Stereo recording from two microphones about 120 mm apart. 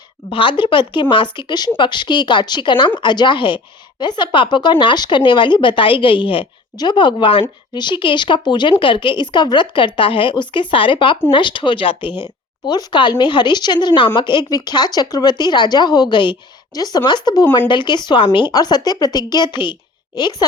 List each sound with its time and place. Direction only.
0.3 s speech: 45° left (ahead or behind)